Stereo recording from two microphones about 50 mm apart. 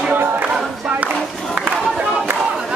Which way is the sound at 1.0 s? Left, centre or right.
Right.